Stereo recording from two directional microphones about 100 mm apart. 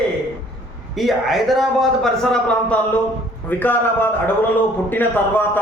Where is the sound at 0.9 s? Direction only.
Centre (ahead or behind).